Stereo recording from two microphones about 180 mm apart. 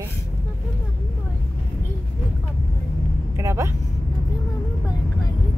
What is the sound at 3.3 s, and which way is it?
Speech, 15° right (ahead or behind).